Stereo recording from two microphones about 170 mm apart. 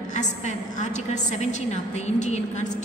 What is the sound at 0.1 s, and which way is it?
A woman's voice, 45° left (ahead or behind).